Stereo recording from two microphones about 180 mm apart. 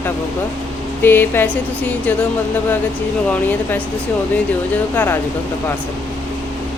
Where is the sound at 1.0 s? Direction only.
10° left (ahead or behind).